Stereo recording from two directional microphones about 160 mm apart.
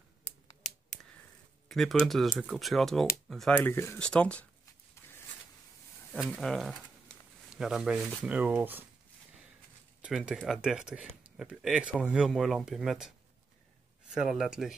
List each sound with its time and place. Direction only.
0.2 s finger snapping: 50° left (ahead or behind)
1.7 s speech: centre (ahead or behind)
6.3 s speech: 5° left (ahead or behind)
10.0 s speech: 5° right (ahead or behind)
14.1 s speech: centre (ahead or behind)